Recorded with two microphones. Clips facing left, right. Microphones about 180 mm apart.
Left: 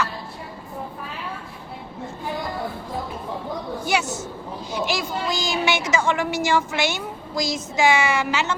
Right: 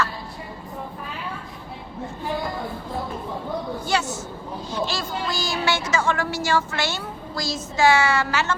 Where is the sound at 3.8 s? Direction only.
10° left (ahead or behind).